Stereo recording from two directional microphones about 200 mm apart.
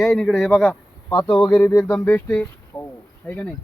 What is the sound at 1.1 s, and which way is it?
Speech, 20° left (ahead or behind).